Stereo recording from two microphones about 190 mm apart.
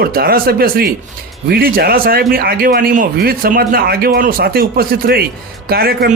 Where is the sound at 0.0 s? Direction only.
50° right (ahead or behind).